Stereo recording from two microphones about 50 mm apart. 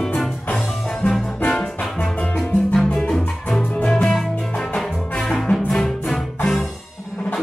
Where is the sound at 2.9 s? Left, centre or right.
Centre.